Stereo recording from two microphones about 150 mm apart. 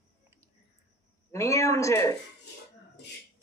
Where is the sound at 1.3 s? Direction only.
20° left (ahead or behind).